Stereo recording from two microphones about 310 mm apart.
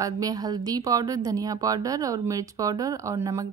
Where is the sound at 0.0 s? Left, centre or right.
Centre.